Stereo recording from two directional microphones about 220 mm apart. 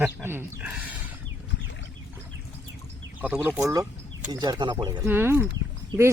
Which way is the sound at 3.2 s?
10° right (ahead or behind).